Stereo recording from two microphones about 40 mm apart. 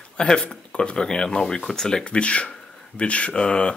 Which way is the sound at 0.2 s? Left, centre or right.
Left.